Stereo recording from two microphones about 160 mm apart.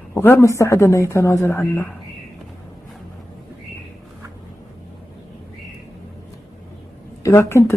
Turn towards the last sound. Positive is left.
turn(degrees=15)  # may be behind; listen again after turning